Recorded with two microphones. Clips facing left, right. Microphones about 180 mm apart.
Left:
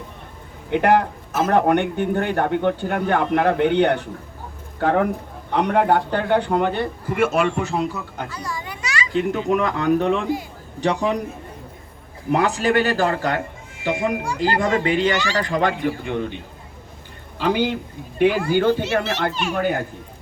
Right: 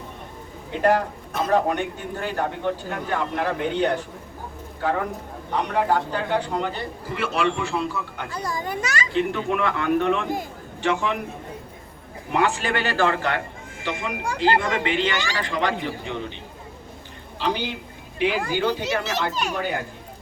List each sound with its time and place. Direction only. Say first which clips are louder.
0.7 s a man's voice: left 3 dB; 65° left (ahead or behind); by 8.3 s 40° left (ahead or behind)
8.3 s a child's voice: right 3 dB; 40° right (ahead or behind)
9.1 s a man's voice: left 4 dB; 40° left (ahead or behind)
12.3 s speech: left 4 dB; 40° left (ahead or behind)
18.2 s speech: left 5 dB; 50° left (ahead or behind)
19.3 s a child's voice: left 2 dB; 40° right (ahead or behind)